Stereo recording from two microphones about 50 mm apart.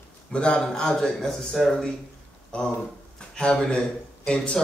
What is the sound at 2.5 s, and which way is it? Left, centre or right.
A man's voice, left.